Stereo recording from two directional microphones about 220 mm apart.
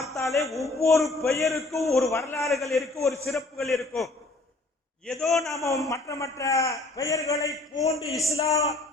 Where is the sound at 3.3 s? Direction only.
Centre (ahead or behind).